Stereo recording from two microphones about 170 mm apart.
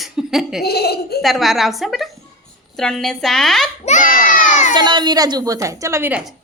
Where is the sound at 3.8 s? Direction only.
50° left (ahead or behind).